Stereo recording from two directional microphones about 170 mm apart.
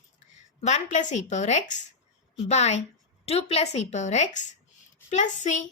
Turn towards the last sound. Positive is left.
turn(degrees=45)  # may be behind; listen again after turning